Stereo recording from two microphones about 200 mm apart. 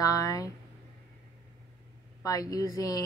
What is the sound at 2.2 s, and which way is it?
Speech, 20° left (ahead or behind).